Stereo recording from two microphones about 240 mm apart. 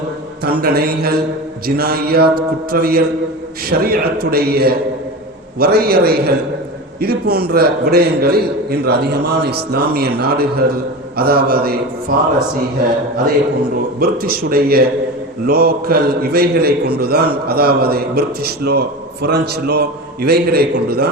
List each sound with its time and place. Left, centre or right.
0.4 s a man's voice: right
14.0 s a man's voice: right